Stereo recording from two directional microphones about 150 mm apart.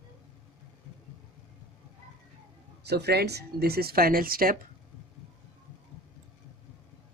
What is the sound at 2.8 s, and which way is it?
Speech, 90° right.